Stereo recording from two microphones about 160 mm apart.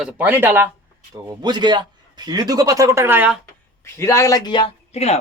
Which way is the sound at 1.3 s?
25° right (ahead or behind).